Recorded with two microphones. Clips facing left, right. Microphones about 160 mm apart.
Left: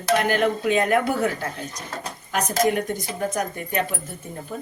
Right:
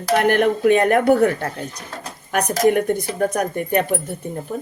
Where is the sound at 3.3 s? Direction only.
60° right (ahead or behind).